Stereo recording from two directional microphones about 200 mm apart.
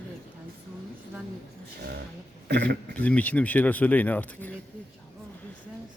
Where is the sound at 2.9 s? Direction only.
5° left (ahead or behind).